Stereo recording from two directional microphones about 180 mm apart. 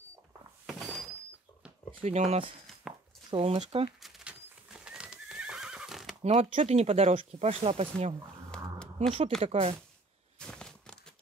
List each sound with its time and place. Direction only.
0.7 s door: centre (ahead or behind)
2.0 s speech: 35° right (ahead or behind)
2.9 s a sound: centre (ahead or behind)
3.3 s speech: 30° right (ahead or behind)
4.0 s neigh: 5° right (ahead or behind)
6.2 s speech: 40° right (ahead or behind)
8.5 s a sound: 5° left (ahead or behind)
9.4 s speech: 35° right (ahead or behind)
10.4 s a sound: 5° left (ahead or behind)